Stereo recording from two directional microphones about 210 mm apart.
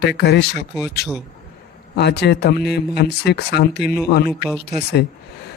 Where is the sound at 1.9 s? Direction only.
50° left (ahead or behind).